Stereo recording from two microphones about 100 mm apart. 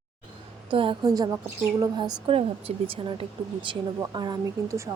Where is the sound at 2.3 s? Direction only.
70° right (ahead or behind).